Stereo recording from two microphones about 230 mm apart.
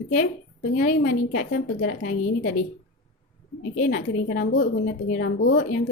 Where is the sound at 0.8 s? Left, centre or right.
Left.